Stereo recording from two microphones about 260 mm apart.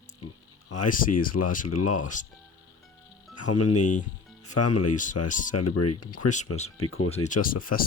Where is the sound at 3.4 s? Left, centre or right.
Left.